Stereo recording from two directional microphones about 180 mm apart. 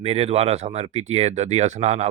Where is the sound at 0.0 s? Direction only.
35° right (ahead or behind).